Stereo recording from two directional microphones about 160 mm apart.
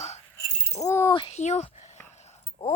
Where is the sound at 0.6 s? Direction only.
20° left (ahead or behind).